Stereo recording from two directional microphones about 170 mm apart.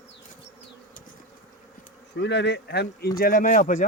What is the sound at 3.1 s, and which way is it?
Speech, 55° left (ahead or behind).